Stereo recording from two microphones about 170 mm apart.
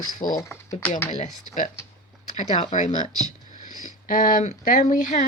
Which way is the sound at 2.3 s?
40° left (ahead or behind).